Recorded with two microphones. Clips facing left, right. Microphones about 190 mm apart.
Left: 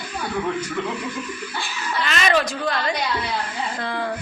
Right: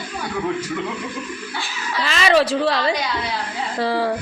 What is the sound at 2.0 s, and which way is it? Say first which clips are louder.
A woman's voice: right 4 dB; 30° right (ahead or behind).